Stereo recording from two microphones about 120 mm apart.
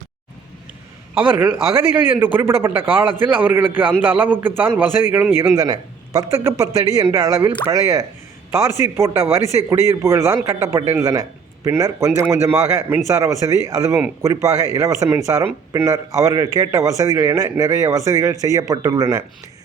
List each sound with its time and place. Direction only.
1.2 s a man's voice: 15° right (ahead or behind)
5.5 s a man's voice: 35° right (ahead or behind)